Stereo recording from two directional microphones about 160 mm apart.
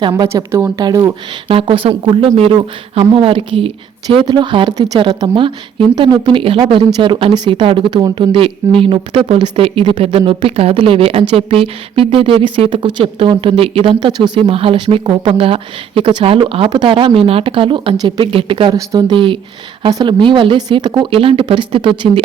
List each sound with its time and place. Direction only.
0.1 s speech: 20° right (ahead or behind)